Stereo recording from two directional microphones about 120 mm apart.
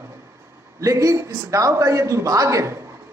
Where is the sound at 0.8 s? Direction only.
25° right (ahead or behind).